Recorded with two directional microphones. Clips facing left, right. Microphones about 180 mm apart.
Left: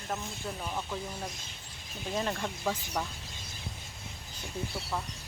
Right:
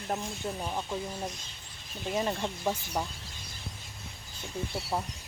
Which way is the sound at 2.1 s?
15° right (ahead or behind).